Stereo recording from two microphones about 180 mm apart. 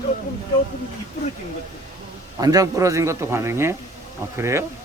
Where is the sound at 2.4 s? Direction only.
20° right (ahead or behind).